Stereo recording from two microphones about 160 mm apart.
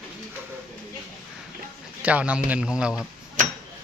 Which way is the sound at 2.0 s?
10° right (ahead or behind).